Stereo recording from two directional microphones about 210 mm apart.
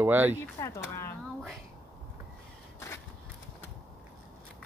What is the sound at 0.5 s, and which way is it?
Speech, 15° left (ahead or behind).